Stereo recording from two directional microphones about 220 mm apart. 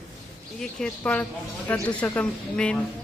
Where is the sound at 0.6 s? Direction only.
5° left (ahead or behind).